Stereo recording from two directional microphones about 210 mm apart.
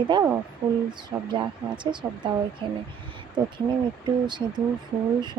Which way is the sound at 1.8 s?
20° right (ahead or behind).